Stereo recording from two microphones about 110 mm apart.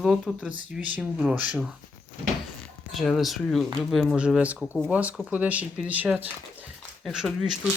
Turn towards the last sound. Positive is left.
turn(degrees=0)  # may be behind; listen again after turning